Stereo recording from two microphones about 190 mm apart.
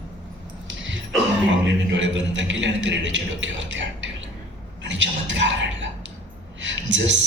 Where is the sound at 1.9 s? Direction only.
75° right (ahead or behind).